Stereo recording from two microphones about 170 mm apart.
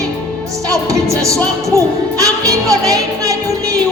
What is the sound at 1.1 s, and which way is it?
Speech, 20° right (ahead or behind).